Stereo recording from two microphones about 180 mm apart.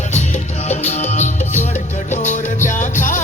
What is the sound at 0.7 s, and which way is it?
Music, 40° left (ahead or behind).